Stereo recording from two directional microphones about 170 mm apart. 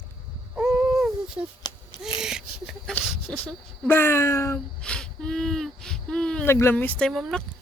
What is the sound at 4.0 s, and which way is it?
Speech, 15° left (ahead or behind).